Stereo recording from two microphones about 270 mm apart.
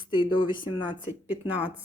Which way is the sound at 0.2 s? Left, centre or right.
Centre.